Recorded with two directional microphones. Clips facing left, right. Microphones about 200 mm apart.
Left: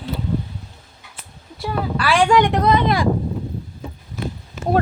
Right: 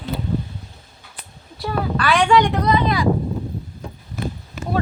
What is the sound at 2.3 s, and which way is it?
Speech, 55° left (ahead or behind).